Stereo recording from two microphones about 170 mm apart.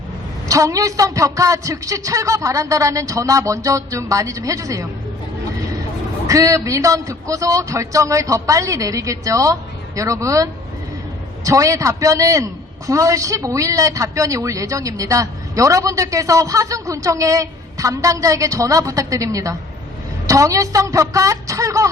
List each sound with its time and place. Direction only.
0.4 s a woman's voice: 20° right (ahead or behind)
6.2 s a woman's voice: 20° right (ahead or behind)